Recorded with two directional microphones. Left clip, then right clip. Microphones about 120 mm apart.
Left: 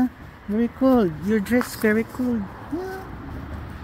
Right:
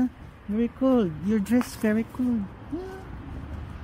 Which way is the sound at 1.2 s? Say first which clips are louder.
Left 4 dB; 35° right (ahead or behind).